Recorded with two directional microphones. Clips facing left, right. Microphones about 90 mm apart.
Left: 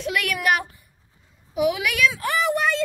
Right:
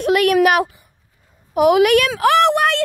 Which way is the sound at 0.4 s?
75° right (ahead or behind).